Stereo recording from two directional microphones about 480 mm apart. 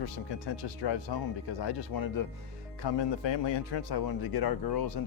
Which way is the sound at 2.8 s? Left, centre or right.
Left.